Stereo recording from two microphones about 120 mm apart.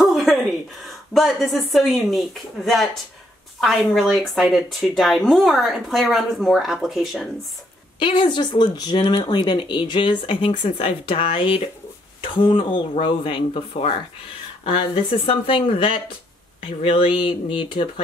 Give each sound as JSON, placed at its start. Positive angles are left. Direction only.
{"t": 0.0, "sound": "a sound", "side_deg": 0}
{"t": 0.8, "sound": "a woman's voice", "side_deg": 0}
{"t": 8.0, "sound": "speech", "side_deg": 40}